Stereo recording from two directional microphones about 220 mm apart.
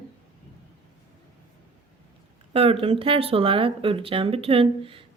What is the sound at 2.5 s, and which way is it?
Speech, 25° right (ahead or behind).